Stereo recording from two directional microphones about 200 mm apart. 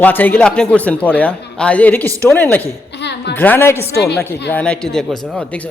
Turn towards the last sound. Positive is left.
turn(degrees=5)  # may be behind; listen again after turning